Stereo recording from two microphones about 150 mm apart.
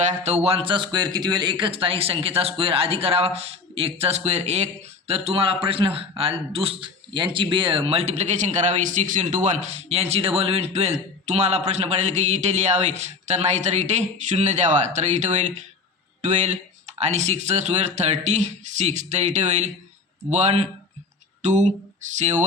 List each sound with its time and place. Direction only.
0.1 s a man's voice: 50° right (ahead or behind)